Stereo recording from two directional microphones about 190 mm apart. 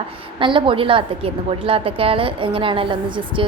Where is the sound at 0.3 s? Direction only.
25° right (ahead or behind).